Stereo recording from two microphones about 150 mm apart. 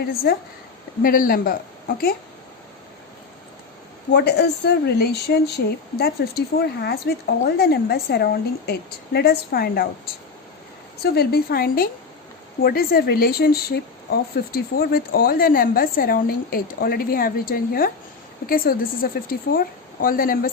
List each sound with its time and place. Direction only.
0.0 s a woman's voice: 90° left
1.0 s a woman's voice: 70° left (ahead or behind)
4.2 s a woman's voice: 90° left
11.0 s a woman's voice: 90° left; by 20.5 s 70° left (ahead or behind)